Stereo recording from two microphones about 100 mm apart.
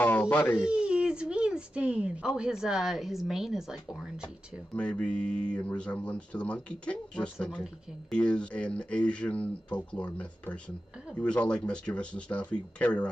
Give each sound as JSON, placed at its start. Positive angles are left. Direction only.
{"t": 0.0, "sound": "a sound", "side_deg": 20}
{"t": 0.6, "sound": "speech", "side_deg": -10}
{"t": 4.7, "sound": "speech", "side_deg": 10}